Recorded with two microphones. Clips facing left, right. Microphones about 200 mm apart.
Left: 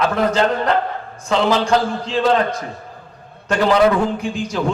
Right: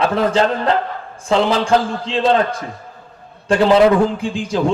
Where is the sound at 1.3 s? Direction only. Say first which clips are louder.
Right 1 dB; 30° right (ahead or behind).